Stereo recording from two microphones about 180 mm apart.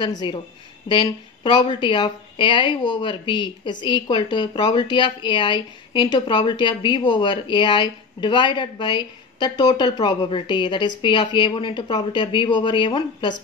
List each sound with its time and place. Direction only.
0.0 s a woman's voice: 25° left (ahead or behind)